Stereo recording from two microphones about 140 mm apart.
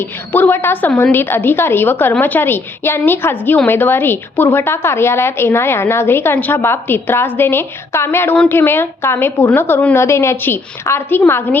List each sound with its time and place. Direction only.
0.0 s a woman's voice: 15° left (ahead or behind)